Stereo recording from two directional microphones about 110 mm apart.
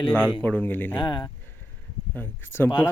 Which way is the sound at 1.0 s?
45° left (ahead or behind).